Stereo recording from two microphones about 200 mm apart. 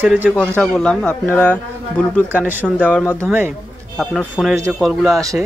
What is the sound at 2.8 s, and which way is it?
Speech, 5° left (ahead or behind).